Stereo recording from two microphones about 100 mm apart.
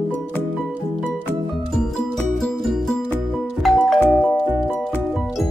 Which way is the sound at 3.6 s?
Centre (ahead or behind).